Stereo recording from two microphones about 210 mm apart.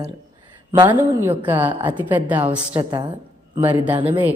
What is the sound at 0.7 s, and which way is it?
Speech, 20° right (ahead or behind).